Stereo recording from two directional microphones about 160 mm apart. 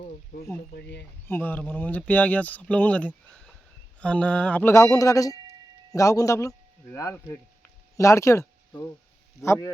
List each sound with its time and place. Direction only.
0.7 s speech: 90° left
1.3 s speech: 10° left (ahead or behind)
3.2 s a sound: 5° left (ahead or behind)
4.0 s speech: 5° left (ahead or behind)